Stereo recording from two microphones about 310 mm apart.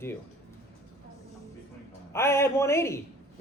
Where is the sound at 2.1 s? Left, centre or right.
Centre.